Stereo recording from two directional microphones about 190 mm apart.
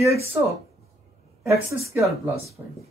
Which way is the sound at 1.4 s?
15° right (ahead or behind).